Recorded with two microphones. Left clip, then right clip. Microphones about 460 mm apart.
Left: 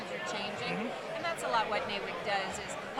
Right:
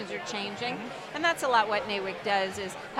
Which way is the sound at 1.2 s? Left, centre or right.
Right.